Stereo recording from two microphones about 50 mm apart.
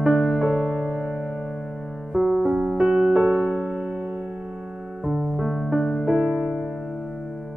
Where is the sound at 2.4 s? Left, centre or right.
Centre.